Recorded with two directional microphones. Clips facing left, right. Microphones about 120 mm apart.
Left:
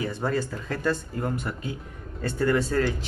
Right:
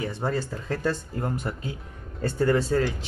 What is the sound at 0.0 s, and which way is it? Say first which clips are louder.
Speech: left 1 dB; 25° right (ahead or behind).